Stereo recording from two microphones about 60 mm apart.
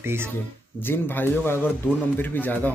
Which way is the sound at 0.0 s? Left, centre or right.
Right.